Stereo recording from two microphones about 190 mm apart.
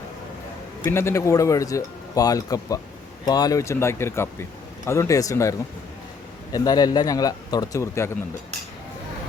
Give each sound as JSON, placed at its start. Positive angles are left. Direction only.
{"t": 0.9, "sound": "speech", "side_deg": 15}